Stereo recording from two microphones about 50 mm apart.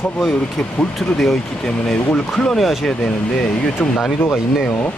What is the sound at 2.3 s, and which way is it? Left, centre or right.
Speech, centre.